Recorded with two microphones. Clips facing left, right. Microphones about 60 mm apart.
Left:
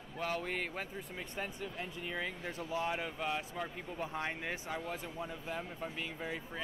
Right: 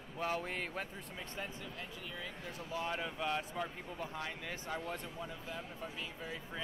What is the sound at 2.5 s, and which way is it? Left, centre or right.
Speech, left.